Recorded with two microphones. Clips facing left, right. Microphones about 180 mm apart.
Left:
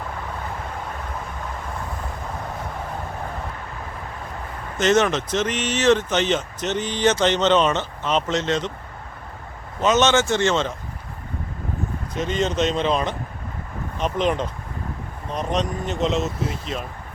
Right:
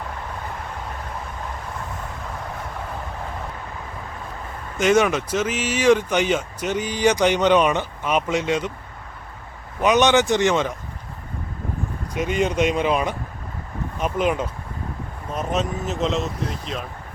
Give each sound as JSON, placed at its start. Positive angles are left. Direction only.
{"t": 4.8, "sound": "speech", "side_deg": -10}
{"t": 9.8, "sound": "speech", "side_deg": -15}
{"t": 12.1, "sound": "speech", "side_deg": -10}